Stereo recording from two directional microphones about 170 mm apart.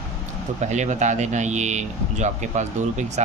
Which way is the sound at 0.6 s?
45° right (ahead or behind).